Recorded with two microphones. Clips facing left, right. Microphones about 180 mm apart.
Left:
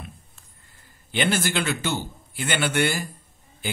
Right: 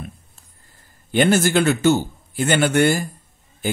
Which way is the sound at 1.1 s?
45° right (ahead or behind).